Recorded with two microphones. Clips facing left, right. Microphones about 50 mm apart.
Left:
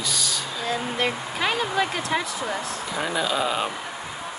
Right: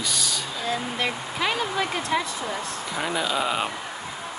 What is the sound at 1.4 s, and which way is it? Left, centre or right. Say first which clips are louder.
Vehicle: left 2 dB; centre.